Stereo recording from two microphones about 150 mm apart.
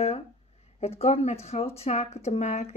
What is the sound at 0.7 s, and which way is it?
Speech, 45° left (ahead or behind).